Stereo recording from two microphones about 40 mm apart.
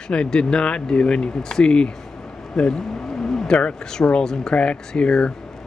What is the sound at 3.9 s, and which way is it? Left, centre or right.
Speech, centre.